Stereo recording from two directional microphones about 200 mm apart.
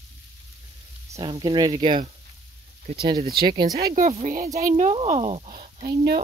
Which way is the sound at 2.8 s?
45° right (ahead or behind).